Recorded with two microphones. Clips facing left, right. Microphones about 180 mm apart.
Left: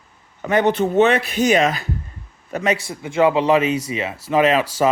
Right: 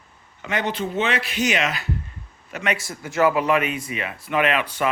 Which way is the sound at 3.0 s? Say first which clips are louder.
Left 3 dB; 25° left (ahead or behind).